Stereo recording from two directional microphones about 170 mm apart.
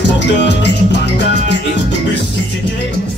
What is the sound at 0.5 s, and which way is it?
Music, 90° left.